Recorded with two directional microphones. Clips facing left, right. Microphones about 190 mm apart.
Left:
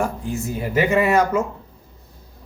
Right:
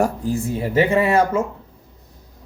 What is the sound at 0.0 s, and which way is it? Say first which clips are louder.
Speech: right 4 dB; 35° right (ahead or behind).